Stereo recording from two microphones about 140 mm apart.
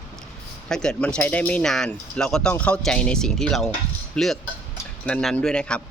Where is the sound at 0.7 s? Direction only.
5° left (ahead or behind).